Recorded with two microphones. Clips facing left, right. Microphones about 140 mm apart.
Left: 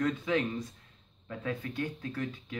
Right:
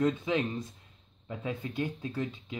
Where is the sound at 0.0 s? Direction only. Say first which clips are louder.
Right 1 dB; 20° right (ahead or behind).